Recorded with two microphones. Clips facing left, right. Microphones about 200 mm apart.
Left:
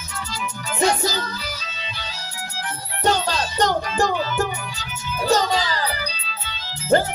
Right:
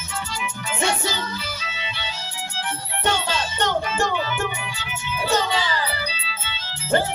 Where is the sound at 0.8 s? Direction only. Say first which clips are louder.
Left 4 dB; 40° left (ahead or behind).